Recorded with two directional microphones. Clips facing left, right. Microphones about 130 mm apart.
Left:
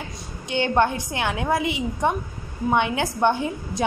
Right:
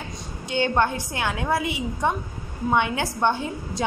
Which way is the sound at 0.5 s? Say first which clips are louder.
Left 1 dB; 20° left (ahead or behind).